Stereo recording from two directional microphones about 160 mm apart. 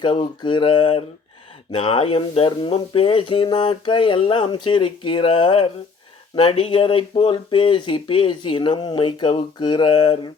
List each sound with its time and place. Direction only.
0.0 s speech: 30° left (ahead or behind)